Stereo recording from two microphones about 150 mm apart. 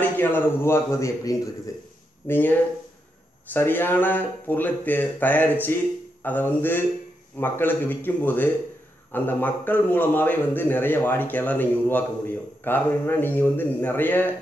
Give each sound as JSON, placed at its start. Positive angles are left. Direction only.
{"t": 0.2, "sound": "a man's voice", "side_deg": 15}
{"t": 3.5, "sound": "a man's voice", "side_deg": 15}